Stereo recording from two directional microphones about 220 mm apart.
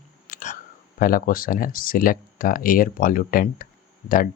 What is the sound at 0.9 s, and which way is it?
Speech, 40° left (ahead or behind).